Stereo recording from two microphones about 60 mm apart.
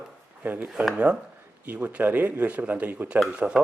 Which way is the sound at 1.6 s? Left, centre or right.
Right.